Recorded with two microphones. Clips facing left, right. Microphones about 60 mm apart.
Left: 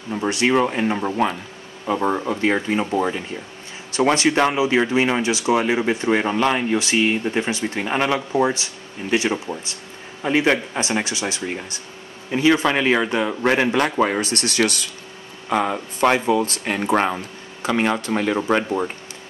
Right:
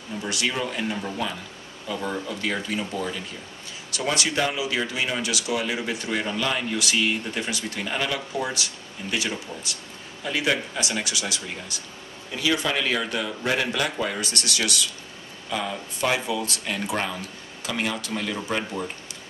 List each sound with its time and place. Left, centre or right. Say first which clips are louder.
0.3 s speech: left 9 dB; left
2.3 s speech: left 8 dB; left